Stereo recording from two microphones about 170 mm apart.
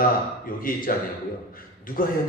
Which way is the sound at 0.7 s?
55° left (ahead or behind).